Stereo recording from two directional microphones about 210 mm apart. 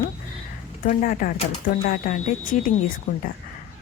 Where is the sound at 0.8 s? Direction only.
40° left (ahead or behind).